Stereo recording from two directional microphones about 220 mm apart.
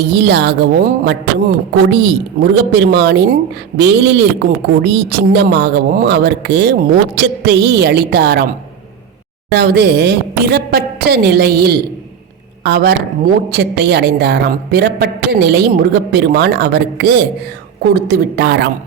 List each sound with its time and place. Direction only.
0.0 s a woman's voice: 50° right (ahead or behind)
9.6 s a woman's voice: 50° right (ahead or behind)